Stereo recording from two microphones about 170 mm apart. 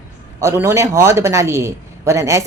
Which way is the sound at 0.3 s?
15° right (ahead or behind).